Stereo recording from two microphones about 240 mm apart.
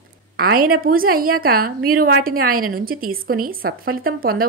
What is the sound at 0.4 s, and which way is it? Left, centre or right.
A woman's voice, right.